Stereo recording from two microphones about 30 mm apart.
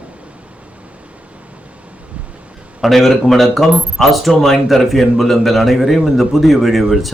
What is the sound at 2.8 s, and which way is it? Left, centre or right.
Speech, centre.